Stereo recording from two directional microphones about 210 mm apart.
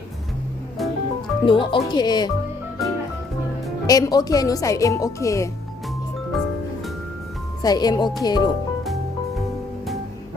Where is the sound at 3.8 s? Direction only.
15° left (ahead or behind).